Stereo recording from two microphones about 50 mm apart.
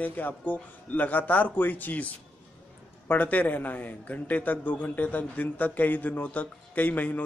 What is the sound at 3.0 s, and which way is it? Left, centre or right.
A man's voice, left.